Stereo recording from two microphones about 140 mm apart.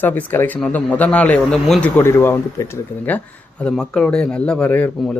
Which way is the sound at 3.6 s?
5° left (ahead or behind).